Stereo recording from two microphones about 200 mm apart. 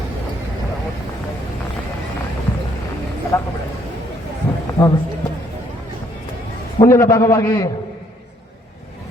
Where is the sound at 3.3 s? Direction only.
15° left (ahead or behind).